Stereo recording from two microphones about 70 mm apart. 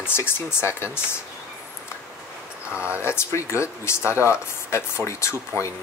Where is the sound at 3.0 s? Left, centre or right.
Left.